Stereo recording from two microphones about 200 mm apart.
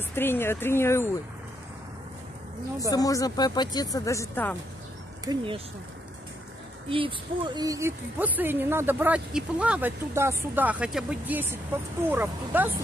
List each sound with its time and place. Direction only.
0.1 s speech: 10° left (ahead or behind)
2.9 s speech: 15° left (ahead or behind)
5.2 s speech: 25° right (ahead or behind)
6.9 s a woman's voice: 25° right (ahead or behind); by 12.7 s 10° right (ahead or behind)